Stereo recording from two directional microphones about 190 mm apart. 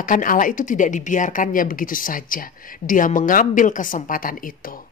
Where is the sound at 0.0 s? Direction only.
45° left (ahead or behind).